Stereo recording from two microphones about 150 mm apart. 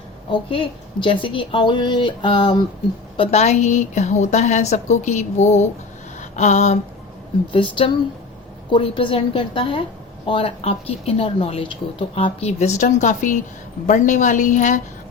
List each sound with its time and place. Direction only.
0.3 s speech: 35° left (ahead or behind)
3.2 s a woman's voice: 45° left (ahead or behind)
6.1 s a sound: 50° left (ahead or behind)
7.5 s a woman's voice: 35° left (ahead or behind); by 14.8 s 55° left (ahead or behind)